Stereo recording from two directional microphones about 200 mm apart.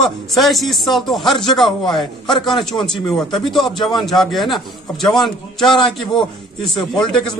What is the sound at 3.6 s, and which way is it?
Speech, 20° left (ahead or behind).